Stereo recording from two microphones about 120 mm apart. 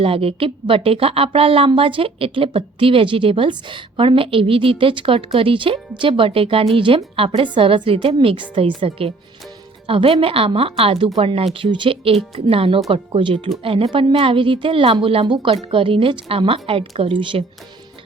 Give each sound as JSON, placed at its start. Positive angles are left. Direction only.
{"t": 0.0, "sound": "speech", "side_deg": -50}